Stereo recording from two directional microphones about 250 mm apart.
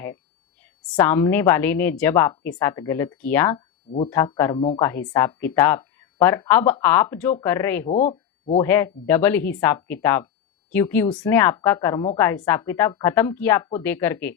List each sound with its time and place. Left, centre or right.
0.9 s speech: centre
4.9 s speech: centre
7.9 s speech: left
8.6 s speech: centre